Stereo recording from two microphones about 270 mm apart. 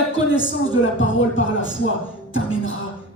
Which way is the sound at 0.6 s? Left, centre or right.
Left.